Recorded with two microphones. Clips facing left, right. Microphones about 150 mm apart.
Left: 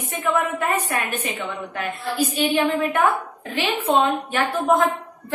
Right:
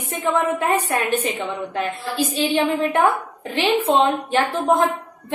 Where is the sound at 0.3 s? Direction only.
25° right (ahead or behind).